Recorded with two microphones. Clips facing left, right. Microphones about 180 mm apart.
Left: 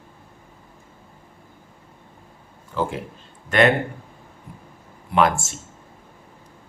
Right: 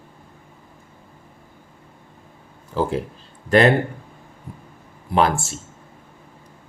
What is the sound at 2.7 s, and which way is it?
Speech, 35° right (ahead or behind).